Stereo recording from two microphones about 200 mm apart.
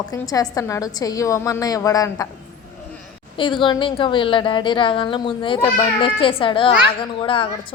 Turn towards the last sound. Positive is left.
turn(degrees=25)  # may be behind; listen again after turning